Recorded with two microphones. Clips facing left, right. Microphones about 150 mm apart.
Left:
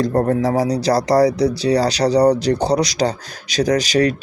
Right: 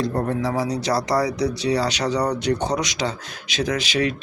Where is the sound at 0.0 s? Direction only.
40° left (ahead or behind).